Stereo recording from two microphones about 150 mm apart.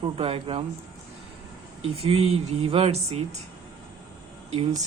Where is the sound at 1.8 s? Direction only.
40° right (ahead or behind).